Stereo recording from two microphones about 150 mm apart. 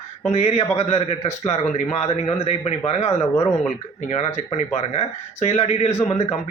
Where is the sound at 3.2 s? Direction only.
20° left (ahead or behind).